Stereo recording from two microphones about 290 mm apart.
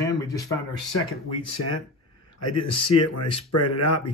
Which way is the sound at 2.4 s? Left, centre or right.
Left.